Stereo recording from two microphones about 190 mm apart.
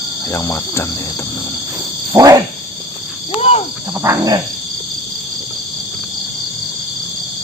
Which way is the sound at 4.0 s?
15° right (ahead or behind).